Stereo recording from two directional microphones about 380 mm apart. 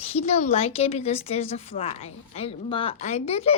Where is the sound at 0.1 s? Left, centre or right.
Centre.